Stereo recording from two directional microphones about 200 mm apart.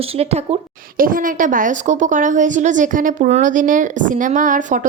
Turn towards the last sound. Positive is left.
turn(degrees=-40)  # may be behind; listen again after turning